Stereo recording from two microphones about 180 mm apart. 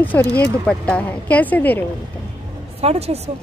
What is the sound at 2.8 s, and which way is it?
Speech, 35° right (ahead or behind).